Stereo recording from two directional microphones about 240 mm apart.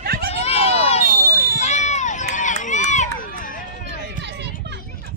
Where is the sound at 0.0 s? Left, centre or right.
Right.